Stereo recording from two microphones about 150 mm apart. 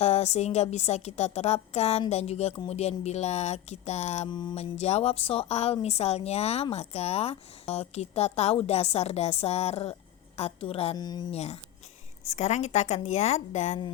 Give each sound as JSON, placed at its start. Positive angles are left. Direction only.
{"t": 0.0, "sound": "a woman's voice", "side_deg": 45}
{"t": 4.3, "sound": "mantra", "side_deg": 30}
{"t": 4.5, "sound": "a woman's voice", "side_deg": 45}
{"t": 10.9, "sound": "mantra", "side_deg": 25}
{"t": 11.3, "sound": "a woman's voice", "side_deg": 45}